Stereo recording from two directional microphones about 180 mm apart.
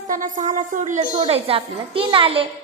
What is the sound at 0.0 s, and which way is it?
Speech, 45° right (ahead or behind).